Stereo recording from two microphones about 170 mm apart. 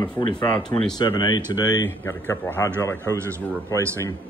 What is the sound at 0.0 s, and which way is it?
Speech, 25° left (ahead or behind).